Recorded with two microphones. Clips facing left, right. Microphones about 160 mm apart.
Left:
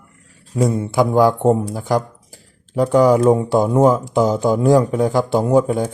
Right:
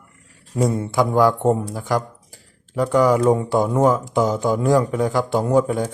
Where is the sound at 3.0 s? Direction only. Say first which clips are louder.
Left 3 dB; 15° left (ahead or behind).